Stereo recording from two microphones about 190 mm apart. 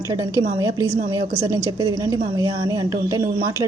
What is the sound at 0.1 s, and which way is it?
A woman's voice, 15° right (ahead or behind).